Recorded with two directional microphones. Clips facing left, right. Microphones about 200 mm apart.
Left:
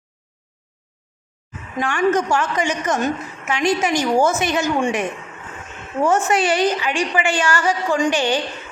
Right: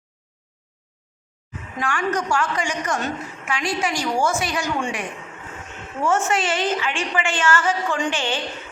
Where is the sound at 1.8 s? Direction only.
20° left (ahead or behind).